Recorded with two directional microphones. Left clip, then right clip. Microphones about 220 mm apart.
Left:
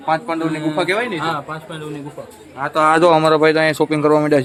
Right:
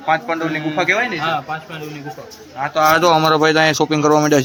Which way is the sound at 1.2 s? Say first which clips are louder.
Right 2 dB; 25° left (ahead or behind).